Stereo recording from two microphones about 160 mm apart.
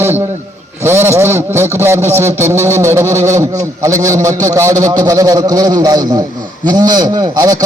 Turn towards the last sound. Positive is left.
turn(degrees=-25)  # may be behind; listen again after turning